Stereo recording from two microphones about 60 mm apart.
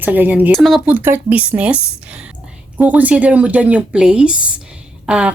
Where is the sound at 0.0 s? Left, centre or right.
Right.